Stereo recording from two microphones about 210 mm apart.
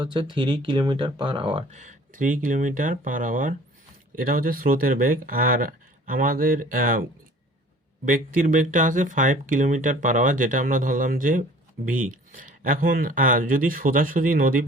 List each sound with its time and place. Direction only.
0.0 s speech: 20° right (ahead or behind); by 7.0 s 40° right (ahead or behind)
8.0 s speech: 40° right (ahead or behind)